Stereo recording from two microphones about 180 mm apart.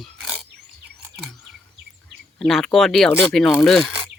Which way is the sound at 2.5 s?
Centre (ahead or behind).